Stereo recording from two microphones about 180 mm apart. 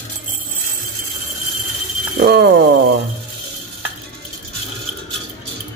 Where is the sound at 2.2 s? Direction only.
55° right (ahead or behind).